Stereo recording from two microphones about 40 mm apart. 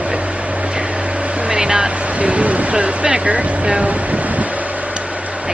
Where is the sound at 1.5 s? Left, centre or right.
Right.